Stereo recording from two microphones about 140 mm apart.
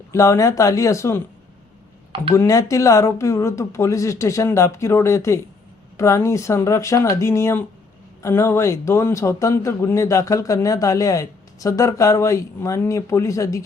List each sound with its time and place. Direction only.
0.1 s speech: 20° left (ahead or behind)
2.3 s speech: 20° left (ahead or behind)